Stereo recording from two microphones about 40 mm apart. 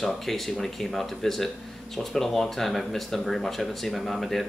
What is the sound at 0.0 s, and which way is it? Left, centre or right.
Speech, centre.